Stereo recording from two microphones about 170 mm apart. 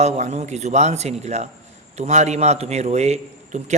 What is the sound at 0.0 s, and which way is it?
A man's voice, 40° right (ahead or behind).